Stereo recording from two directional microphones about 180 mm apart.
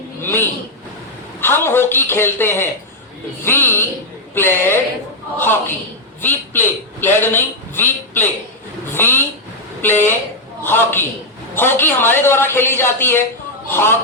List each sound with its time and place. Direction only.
0.2 s a man's voice: 10° left (ahead or behind)